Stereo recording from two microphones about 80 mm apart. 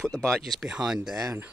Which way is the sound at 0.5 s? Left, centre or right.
Centre.